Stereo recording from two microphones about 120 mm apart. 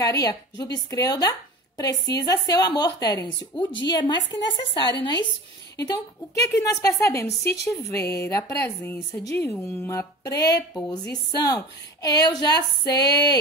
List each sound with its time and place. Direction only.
0.0 s a woman's voice: 30° left (ahead or behind)